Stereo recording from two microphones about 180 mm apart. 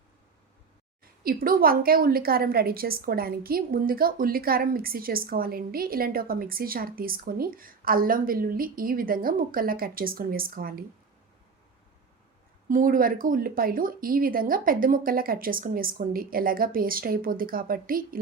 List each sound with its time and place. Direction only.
1.2 s a woman's voice: 55° right (ahead or behind)
12.6 s a woman's voice: 50° right (ahead or behind)